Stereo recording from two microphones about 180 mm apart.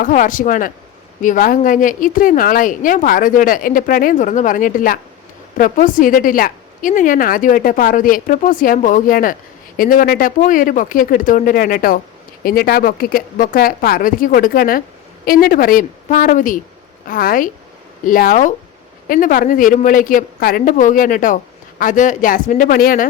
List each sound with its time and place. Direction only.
0.0 s speech: 45° left (ahead or behind)